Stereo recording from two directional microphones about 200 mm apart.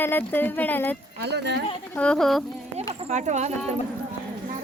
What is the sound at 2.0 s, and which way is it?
Speech, 5° left (ahead or behind).